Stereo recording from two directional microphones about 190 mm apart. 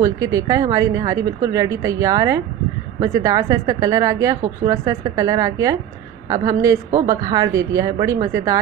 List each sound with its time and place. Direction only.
0.0 s speech: 15° right (ahead or behind)